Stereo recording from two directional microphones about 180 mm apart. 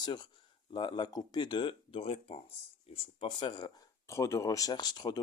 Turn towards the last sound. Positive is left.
turn(degrees=20)  # may be behind; listen again after turning